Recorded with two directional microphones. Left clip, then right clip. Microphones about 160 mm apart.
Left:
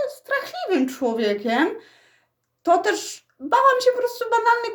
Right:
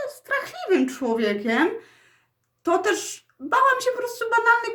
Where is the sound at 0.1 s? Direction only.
10° right (ahead or behind).